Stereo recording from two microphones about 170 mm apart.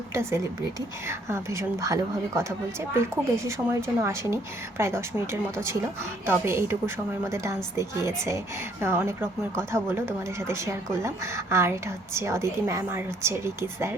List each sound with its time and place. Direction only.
0.1 s speech: 15° right (ahead or behind)